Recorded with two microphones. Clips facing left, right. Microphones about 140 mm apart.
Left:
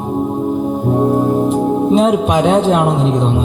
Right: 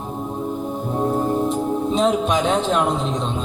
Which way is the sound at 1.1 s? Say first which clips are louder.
Left 7 dB; 55° left (ahead or behind).